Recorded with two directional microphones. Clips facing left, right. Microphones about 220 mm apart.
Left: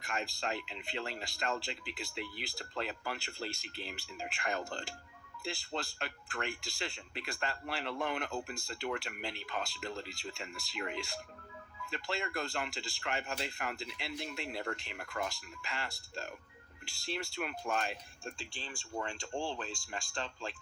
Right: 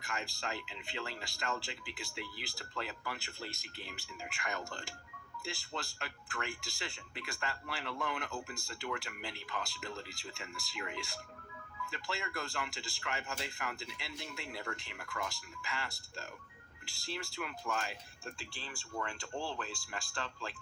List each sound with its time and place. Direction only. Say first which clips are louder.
0.0 s speech: left 3 dB; 25° left (ahead or behind)
18.9 s speech: left 2 dB; 25° left (ahead or behind)